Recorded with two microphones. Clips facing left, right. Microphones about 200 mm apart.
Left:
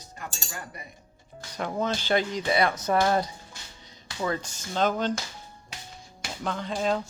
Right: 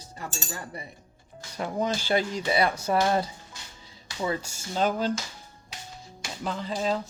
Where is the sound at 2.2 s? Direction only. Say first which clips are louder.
Even; 35° right (ahead or behind).